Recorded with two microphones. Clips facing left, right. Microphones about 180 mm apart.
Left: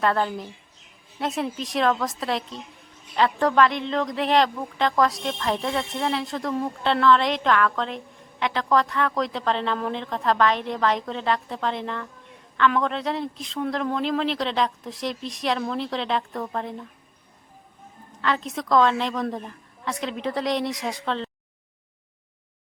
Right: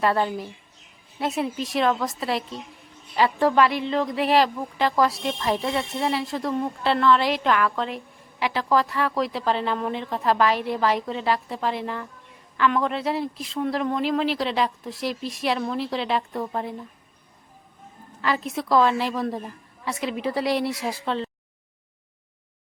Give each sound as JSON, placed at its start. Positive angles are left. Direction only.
{"t": 0.0, "sound": "speech", "side_deg": -5}
{"t": 18.2, "sound": "speech", "side_deg": -5}